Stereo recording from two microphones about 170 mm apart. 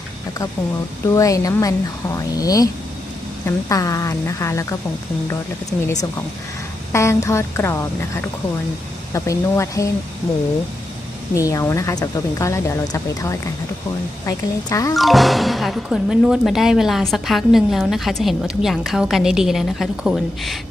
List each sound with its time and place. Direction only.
1.0 s speech: 20° left (ahead or behind)
6.9 s a woman's voice: 15° left (ahead or behind)
11.3 s speech: 20° left (ahead or behind)
14.9 s speech: centre (ahead or behind)